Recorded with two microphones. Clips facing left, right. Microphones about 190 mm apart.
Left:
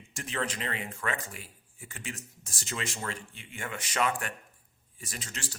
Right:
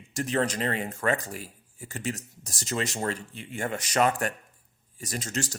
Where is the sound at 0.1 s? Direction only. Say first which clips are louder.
Right 8 dB; 40° right (ahead or behind).